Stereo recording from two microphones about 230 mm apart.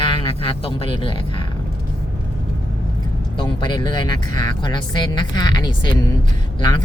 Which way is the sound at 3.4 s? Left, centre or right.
Centre.